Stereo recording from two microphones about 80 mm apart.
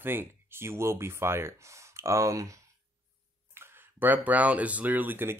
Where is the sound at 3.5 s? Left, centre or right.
Right.